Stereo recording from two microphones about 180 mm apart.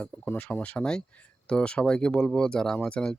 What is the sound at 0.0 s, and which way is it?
Speech, 10° left (ahead or behind).